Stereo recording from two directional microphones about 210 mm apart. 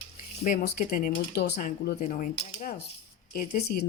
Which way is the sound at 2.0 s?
40° left (ahead or behind).